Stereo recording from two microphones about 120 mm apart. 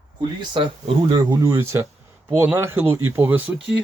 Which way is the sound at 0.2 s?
40° right (ahead or behind).